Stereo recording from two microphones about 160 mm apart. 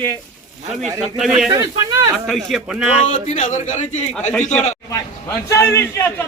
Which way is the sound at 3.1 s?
55° left (ahead or behind).